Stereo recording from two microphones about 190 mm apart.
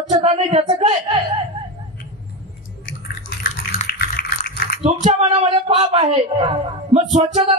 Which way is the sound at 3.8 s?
55° left (ahead or behind).